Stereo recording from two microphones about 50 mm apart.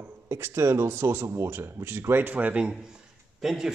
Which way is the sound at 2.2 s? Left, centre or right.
Right.